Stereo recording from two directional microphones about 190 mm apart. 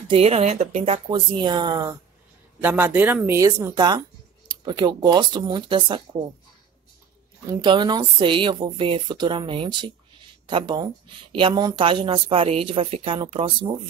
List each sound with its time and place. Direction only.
0.1 s speech: 30° right (ahead or behind)
2.6 s speech: 10° right (ahead or behind); by 6.0 s 25° right (ahead or behind)
7.4 s speech: 20° right (ahead or behind)